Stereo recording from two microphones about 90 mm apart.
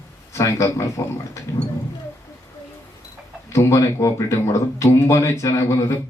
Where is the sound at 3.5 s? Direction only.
30° left (ahead or behind).